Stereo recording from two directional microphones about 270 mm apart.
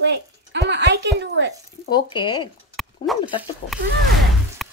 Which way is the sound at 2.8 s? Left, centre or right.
Centre.